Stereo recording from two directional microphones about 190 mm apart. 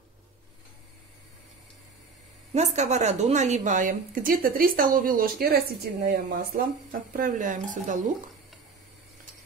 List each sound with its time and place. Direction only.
2.5 s a woman's voice: 35° right (ahead or behind)